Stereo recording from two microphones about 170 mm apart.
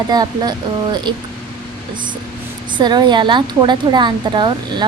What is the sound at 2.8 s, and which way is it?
A woman's voice, 25° right (ahead or behind).